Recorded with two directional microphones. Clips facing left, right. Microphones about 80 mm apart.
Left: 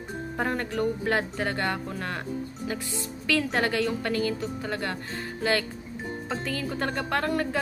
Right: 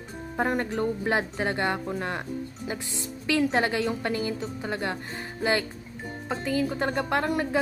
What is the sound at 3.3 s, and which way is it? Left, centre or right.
Speech, centre.